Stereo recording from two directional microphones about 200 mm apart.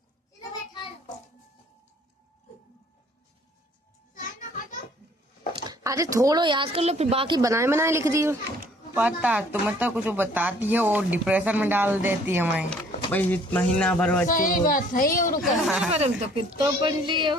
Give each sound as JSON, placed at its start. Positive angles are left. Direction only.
{"t": 4.1, "sound": "children playing", "side_deg": 40}
{"t": 5.6, "sound": "speech", "side_deg": -15}
{"t": 13.1, "sound": "speech", "side_deg": 10}
{"t": 14.3, "sound": "speech", "side_deg": 40}
{"t": 15.4, "sound": "speech", "side_deg": 0}
{"t": 15.9, "sound": "speech", "side_deg": -30}